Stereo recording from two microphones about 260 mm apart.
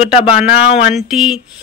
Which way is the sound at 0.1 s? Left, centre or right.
Left.